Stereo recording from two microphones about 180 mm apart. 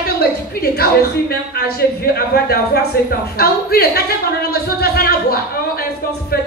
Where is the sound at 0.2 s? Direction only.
60° left (ahead or behind).